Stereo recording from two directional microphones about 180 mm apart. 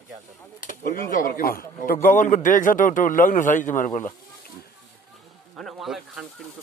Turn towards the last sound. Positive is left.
turn(degrees=0)  # may be behind; listen again after turning